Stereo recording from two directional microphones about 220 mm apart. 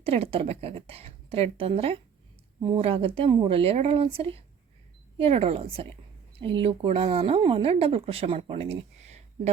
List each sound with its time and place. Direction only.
0.0 s speech: 25° right (ahead or behind)